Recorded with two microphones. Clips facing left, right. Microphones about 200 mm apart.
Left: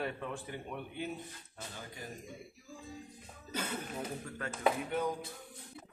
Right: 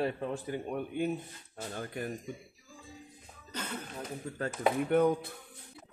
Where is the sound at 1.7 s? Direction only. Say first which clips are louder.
Right 11 dB; 60° right (ahead or behind).